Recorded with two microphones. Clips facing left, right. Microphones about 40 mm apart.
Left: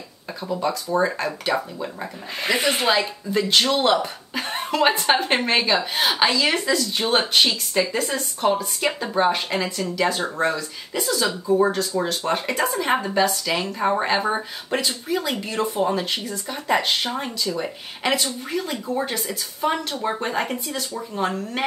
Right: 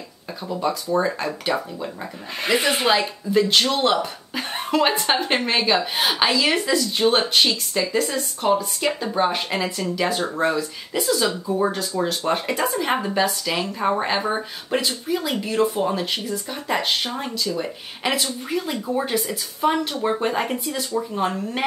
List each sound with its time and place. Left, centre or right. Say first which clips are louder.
0.5 s speech: right 1 dB; centre